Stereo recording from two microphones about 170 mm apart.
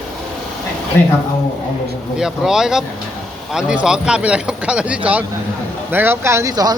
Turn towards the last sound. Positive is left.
turn(degrees=-20)  # may be behind; listen again after turning